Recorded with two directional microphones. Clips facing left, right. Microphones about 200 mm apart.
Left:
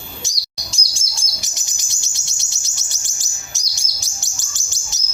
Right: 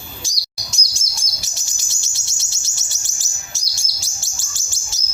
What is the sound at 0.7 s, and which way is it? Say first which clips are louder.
Chirp: right 1 dB; 30° left (ahead or behind).